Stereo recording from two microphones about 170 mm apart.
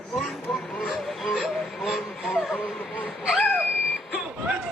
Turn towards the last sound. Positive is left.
turn(degrees=-5)  # may be behind; listen again after turning